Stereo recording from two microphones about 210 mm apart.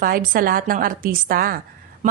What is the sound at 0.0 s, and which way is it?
Speech, 45° right (ahead or behind).